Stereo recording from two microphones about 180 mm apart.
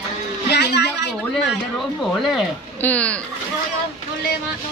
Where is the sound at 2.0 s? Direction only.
5° left (ahead or behind).